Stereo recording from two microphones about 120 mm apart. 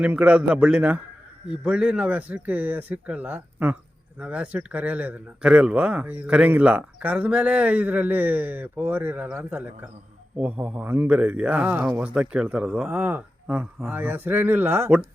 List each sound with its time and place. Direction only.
0.0 s speech: 10° right (ahead or behind)
11.9 s speech: 10° right (ahead or behind)